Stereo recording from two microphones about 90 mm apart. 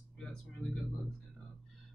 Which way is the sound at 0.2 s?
5° left (ahead or behind).